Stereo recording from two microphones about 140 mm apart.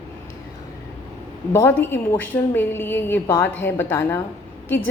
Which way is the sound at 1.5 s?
15° left (ahead or behind).